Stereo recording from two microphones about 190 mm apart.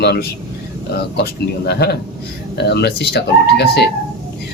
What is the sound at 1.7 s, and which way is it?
A man's voice, 60° left (ahead or behind).